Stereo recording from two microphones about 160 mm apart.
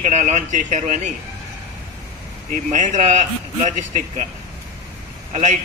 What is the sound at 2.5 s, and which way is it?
Speech, 50° right (ahead or behind).